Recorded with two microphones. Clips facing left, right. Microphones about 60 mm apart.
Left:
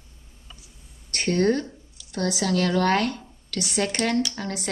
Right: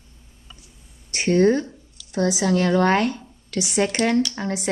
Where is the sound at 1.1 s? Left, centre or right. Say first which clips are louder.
Right 4 dB; centre.